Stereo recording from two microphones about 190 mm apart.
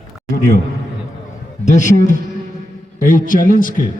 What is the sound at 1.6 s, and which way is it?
Speech, 40° left (ahead or behind).